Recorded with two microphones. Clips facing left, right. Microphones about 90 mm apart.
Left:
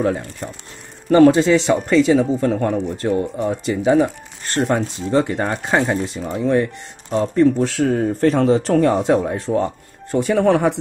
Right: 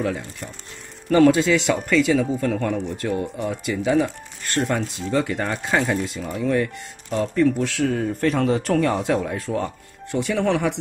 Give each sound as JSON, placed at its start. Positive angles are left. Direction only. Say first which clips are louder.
{"t": 0.0, "sound": "speech", "louder": "left 5 dB", "side_deg": 35}